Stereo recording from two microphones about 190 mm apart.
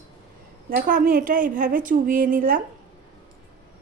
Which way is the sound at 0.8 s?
50° right (ahead or behind).